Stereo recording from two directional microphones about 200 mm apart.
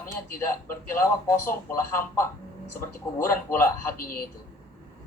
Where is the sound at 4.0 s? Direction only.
45° left (ahead or behind).